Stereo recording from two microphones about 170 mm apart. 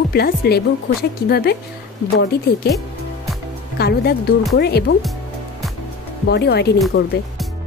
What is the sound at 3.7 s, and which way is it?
Speech, 70° left (ahead or behind).